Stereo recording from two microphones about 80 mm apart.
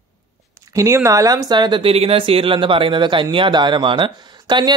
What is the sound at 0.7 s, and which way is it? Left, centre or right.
Speech, right.